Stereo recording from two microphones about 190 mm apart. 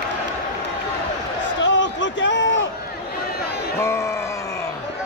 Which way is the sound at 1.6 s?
75° left (ahead or behind).